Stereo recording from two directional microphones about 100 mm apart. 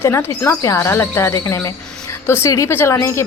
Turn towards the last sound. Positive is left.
turn(degrees=25)  # may be behind; listen again after turning